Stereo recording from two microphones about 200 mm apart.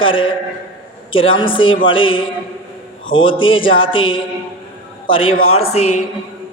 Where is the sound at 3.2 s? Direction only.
25° left (ahead or behind).